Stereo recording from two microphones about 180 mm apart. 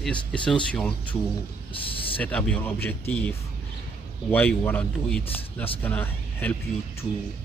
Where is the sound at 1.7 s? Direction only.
30° left (ahead or behind).